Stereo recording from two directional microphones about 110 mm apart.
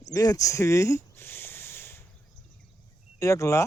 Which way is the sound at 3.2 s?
25° left (ahead or behind).